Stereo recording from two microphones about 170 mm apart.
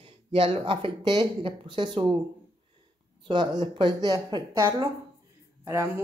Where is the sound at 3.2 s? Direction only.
25° right (ahead or behind).